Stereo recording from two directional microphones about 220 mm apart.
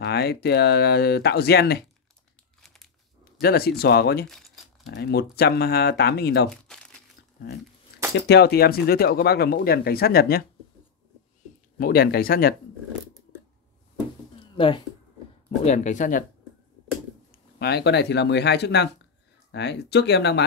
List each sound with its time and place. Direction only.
0.0 s speech: 50° left (ahead or behind)
2.6 s crumpling: centre (ahead or behind)
3.3 s speech: 45° left (ahead or behind)
6.5 s crumpling: 5° left (ahead or behind)
7.9 s a sound: 45° left (ahead or behind)
8.3 s speech: 45° left (ahead or behind)
11.8 s speech: 40° left (ahead or behind)
14.4 s a sound: 25° left (ahead or behind)
15.6 s speech: 30° left (ahead or behind)
17.6 s speech: 50° left (ahead or behind)